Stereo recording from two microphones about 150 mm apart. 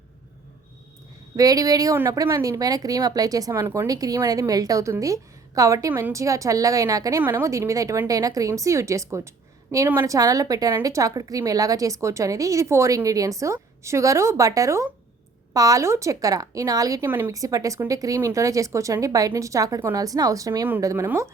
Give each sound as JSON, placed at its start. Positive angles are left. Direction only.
{"t": 1.4, "sound": "a woman's voice", "side_deg": -25}